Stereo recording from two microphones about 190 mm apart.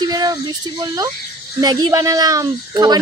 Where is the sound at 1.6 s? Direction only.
20° right (ahead or behind).